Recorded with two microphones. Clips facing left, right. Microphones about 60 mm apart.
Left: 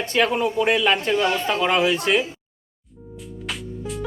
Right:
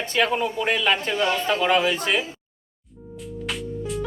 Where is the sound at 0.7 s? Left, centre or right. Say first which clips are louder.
Left 2 dB; left.